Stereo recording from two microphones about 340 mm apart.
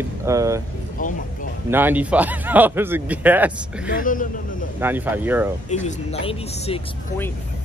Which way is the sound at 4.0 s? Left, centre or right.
Left.